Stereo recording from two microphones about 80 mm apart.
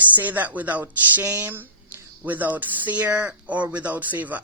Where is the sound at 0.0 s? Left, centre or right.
Right.